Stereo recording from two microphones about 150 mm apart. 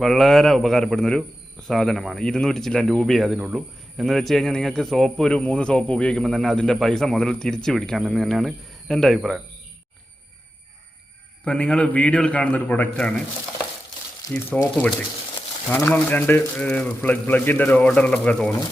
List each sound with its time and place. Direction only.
0.0 s speech: centre (ahead or behind)
11.4 s a man's voice: 5° left (ahead or behind)
14.2 s speech: 20° left (ahead or behind)
15.7 s a man's voice: 15° left (ahead or behind)